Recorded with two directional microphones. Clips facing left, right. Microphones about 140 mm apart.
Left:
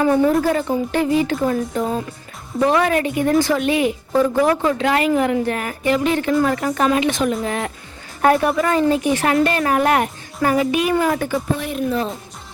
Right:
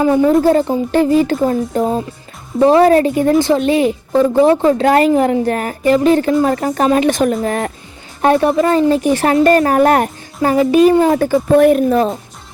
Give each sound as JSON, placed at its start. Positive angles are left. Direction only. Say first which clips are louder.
{"t": 0.0, "sound": "a woman's voice", "louder": "right 4 dB", "side_deg": -20}
{"t": 0.4, "sound": "a woman's voice", "louder": "right 6 dB", "side_deg": -30}
{"t": 8.2, "sound": "a woman's voice", "louder": "right 4 dB", "side_deg": -25}
{"t": 11.5, "sound": "speech", "louder": "right 12 dB", "side_deg": -55}